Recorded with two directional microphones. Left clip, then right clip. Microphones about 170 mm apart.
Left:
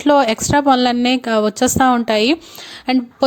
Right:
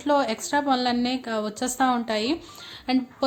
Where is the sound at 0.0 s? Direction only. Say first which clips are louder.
Left 10 dB; 50° left (ahead or behind).